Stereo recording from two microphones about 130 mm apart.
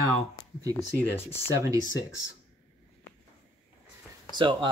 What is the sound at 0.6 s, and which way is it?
Speech, 30° right (ahead or behind).